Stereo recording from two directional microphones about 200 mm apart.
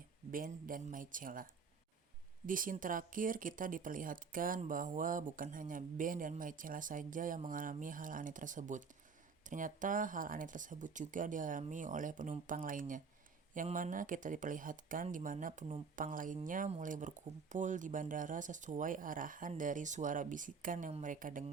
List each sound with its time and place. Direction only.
0.3 s speech: 45° right (ahead or behind)
2.5 s speech: 45° right (ahead or behind)